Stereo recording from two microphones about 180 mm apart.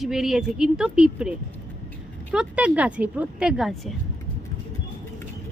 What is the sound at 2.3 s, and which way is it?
A woman's voice, 5° right (ahead or behind).